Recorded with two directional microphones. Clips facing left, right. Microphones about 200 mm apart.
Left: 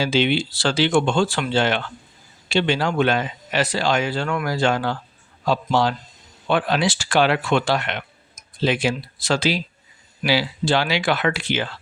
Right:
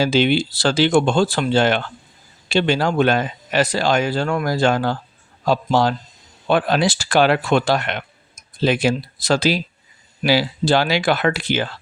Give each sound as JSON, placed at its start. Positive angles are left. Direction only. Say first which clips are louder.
{"t": 0.0, "sound": "a man's voice", "louder": "right 3 dB", "side_deg": -40}